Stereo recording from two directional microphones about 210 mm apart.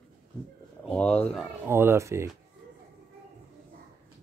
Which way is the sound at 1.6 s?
10° right (ahead or behind).